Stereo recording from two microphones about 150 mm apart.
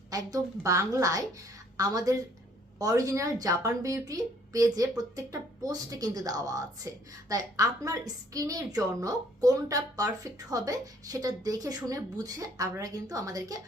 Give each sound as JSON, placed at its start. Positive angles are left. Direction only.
{"t": 0.1, "sound": "a woman's voice", "side_deg": -25}